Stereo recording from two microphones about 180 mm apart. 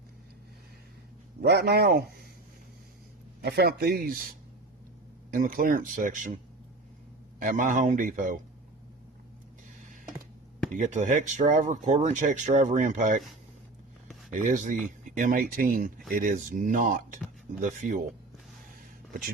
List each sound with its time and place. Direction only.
1.4 s speech: 65° right (ahead or behind)
3.4 s speech: 60° right (ahead or behind)
10.7 s speech: 40° right (ahead or behind)
14.3 s speech: 45° right (ahead or behind)